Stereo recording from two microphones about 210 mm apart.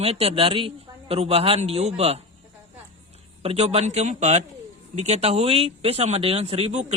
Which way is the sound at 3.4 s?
30° right (ahead or behind).